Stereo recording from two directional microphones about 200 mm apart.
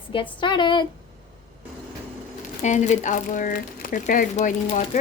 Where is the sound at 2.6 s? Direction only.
35° left (ahead or behind).